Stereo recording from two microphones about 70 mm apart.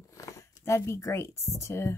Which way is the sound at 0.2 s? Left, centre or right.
Left.